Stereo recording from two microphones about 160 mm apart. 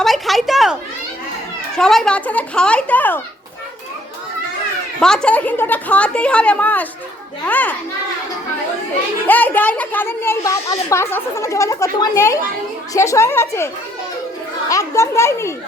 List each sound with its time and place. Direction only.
0.0 s a sound: centre (ahead or behind)
1.7 s a child's voice: 5° left (ahead or behind)
4.9 s a child's voice: 5° left (ahead or behind)
9.2 s a child's voice: 10° left (ahead or behind)
14.7 s a child's voice: 20° left (ahead or behind)